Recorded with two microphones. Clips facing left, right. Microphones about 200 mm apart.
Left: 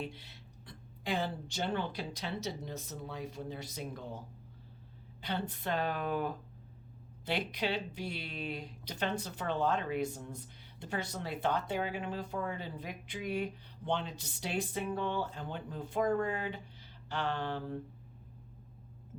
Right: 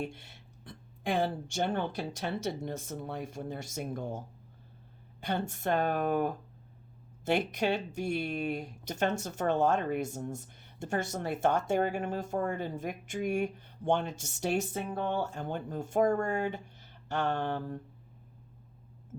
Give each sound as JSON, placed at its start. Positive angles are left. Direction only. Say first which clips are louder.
{"t": 0.0, "sound": "speech", "louder": "right 4 dB", "side_deg": -50}
{"t": 5.2, "sound": "speech", "louder": "right 4 dB", "side_deg": -45}